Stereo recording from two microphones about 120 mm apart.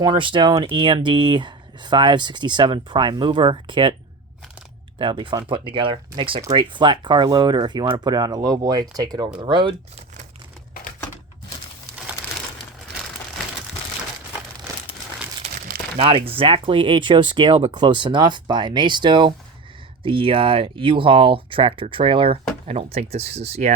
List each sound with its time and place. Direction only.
0.0 s speech: 45° right (ahead or behind)
4.9 s speech: 45° right (ahead or behind)
16.0 s speech: 50° right (ahead or behind); by 23.7 s 65° right (ahead or behind)